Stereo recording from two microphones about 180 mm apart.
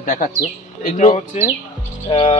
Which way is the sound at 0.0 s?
50° left (ahead or behind).